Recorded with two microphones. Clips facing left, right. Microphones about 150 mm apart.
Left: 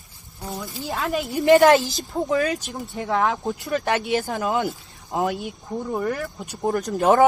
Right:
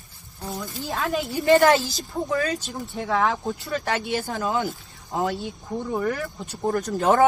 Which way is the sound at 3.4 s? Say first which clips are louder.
Left 3 dB; 20° left (ahead or behind).